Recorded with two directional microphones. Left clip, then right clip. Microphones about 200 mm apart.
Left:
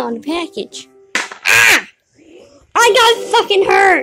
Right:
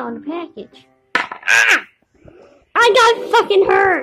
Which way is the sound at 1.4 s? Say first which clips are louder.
Left 3 dB; 25° left (ahead or behind).